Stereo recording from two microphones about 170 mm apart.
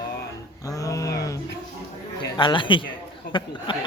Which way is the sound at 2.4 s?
30° left (ahead or behind).